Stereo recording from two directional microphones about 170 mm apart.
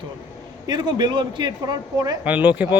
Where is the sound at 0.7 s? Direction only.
25° right (ahead or behind).